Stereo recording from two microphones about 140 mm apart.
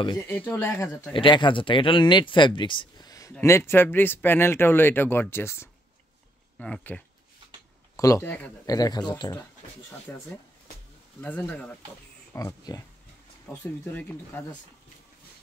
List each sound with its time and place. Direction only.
0.2 s speech: 15° left (ahead or behind)
1.1 s speech: 35° left (ahead or behind); by 7.0 s 10° left (ahead or behind)
7.9 s a man's voice: 25° left (ahead or behind)
8.6 s speech: 25° left (ahead or behind)
12.4 s speech: 25° left (ahead or behind)